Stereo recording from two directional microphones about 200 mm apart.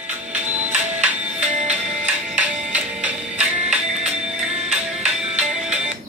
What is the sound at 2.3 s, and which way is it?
Music, 5° right (ahead or behind).